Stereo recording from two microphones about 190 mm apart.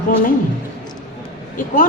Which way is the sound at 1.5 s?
45° left (ahead or behind).